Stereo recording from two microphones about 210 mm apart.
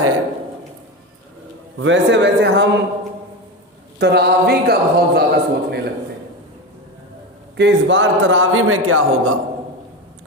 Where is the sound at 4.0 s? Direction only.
50° right (ahead or behind).